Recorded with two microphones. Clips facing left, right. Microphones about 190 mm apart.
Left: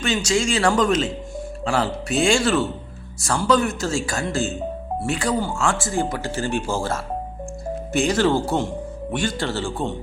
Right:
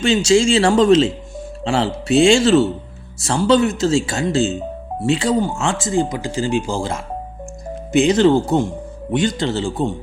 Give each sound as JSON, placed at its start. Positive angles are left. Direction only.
{"t": 0.0, "sound": "speech", "side_deg": -25}